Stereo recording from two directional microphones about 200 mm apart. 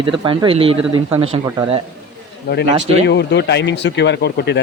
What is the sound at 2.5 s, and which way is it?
Speech, 50° left (ahead or behind).